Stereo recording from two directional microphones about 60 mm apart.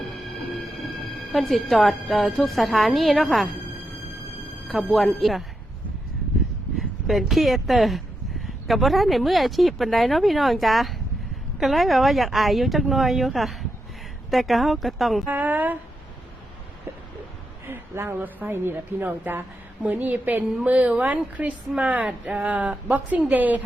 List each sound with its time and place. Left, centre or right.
0.5 s music: centre
1.3 s speech: centre
4.7 s speech: centre
6.7 s speech: centre
15.3 s a woman's voice: right
17.7 s a sound: right
18.2 s a woman's voice: right